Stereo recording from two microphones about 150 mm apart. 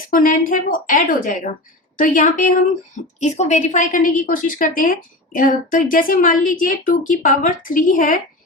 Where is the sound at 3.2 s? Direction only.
50° left (ahead or behind).